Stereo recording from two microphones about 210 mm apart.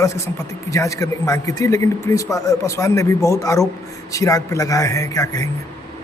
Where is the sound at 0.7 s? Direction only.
15° left (ahead or behind).